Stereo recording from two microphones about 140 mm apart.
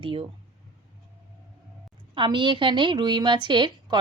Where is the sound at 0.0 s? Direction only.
40° right (ahead or behind).